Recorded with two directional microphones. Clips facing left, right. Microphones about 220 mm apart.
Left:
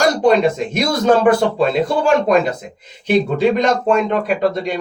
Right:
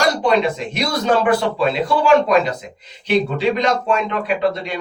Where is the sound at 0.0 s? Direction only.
45° left (ahead or behind).